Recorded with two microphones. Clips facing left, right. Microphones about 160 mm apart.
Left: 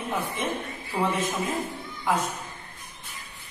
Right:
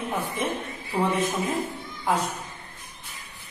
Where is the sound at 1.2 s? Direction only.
10° right (ahead or behind).